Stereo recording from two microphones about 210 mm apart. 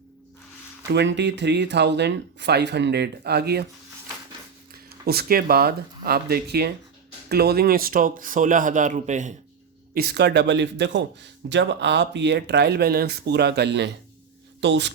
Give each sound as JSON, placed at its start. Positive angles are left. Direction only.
{"t": 0.9, "sound": "speech", "side_deg": -55}
{"t": 4.9, "sound": "speech", "side_deg": -45}
{"t": 9.9, "sound": "speech", "side_deg": -45}